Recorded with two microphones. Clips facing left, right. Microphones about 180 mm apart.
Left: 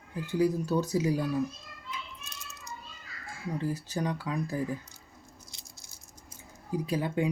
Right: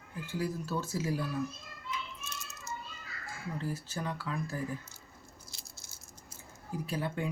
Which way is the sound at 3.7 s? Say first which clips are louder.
Left 6 dB; 15° left (ahead or behind).